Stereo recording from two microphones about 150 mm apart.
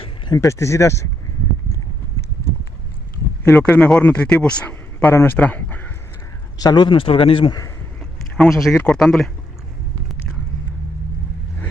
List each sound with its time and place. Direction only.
0.4 s speech: 20° left (ahead or behind)
3.4 s speech: 10° left (ahead or behind)
6.6 s a man's voice: 30° left (ahead or behind)
8.4 s speech: centre (ahead or behind)